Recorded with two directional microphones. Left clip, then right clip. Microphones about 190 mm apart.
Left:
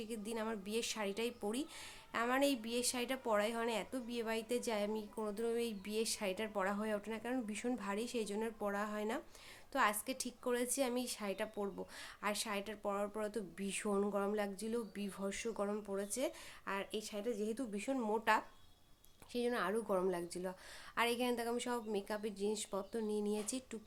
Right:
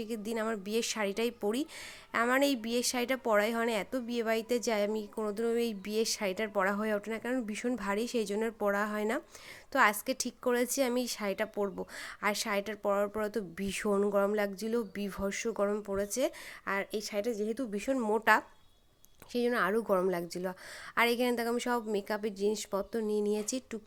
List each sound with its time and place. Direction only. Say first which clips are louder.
0.0 s a woman's voice: right 8 dB; 30° right (ahead or behind)